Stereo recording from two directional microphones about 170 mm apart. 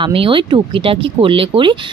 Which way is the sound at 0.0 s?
30° right (ahead or behind).